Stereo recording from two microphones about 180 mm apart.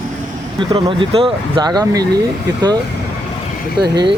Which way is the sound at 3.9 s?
25° right (ahead or behind).